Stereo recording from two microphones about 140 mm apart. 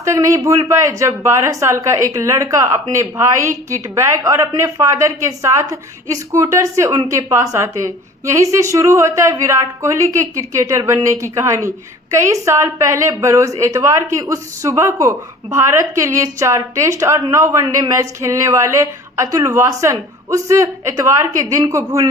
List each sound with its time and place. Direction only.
0.0 s speech: 20° right (ahead or behind)